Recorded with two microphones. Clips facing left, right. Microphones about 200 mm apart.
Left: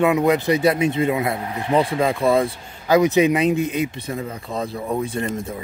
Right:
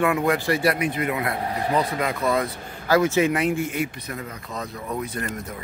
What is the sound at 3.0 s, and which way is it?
Speech, 15° left (ahead or behind).